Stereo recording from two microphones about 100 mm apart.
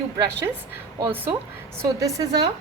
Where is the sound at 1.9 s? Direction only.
35° right (ahead or behind).